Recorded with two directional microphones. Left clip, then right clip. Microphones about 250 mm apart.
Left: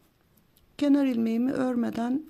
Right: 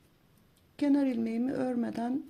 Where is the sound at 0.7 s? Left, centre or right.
Left.